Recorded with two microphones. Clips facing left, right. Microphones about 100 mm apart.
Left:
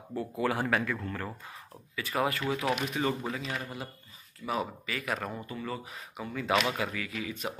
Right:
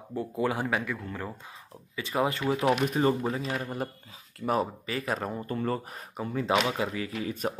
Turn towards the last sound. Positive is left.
turn(degrees=-35)  # may be behind; listen again after turning